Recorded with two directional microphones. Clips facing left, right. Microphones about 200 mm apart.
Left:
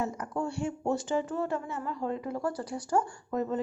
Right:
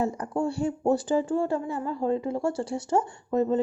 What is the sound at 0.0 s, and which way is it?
A woman's voice, 30° right (ahead or behind).